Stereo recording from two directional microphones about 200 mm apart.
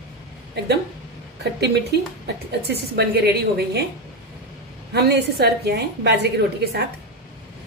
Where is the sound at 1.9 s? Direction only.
55° right (ahead or behind).